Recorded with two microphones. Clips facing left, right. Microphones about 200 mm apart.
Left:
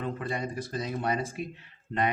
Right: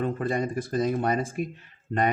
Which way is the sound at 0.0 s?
45° right (ahead or behind).